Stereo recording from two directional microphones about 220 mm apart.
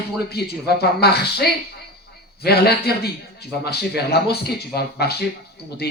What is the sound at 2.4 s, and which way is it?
Speech, 45° left (ahead or behind).